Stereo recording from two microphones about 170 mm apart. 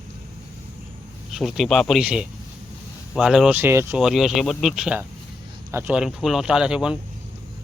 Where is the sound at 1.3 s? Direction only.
Centre (ahead or behind).